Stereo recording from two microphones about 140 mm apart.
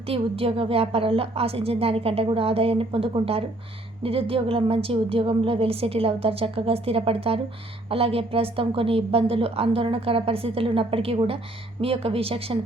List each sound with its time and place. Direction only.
0.1 s a woman's voice: 40° right (ahead or behind)